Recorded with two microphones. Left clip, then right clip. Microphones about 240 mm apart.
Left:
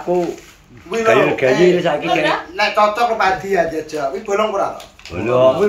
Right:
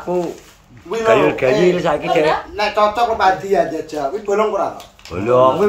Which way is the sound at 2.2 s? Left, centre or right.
Right.